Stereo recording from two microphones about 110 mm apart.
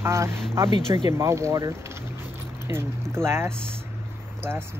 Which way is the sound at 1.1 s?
25° right (ahead or behind).